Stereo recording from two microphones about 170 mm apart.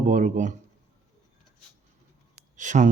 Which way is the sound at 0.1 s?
50° right (ahead or behind).